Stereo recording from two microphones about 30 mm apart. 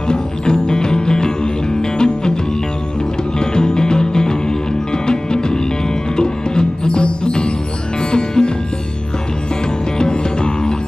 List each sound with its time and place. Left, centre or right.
0.1 s music: left
3.3 s music: left
9.9 s music: left